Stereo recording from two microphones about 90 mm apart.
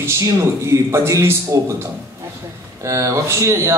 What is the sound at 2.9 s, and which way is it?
Speech, 35° right (ahead or behind).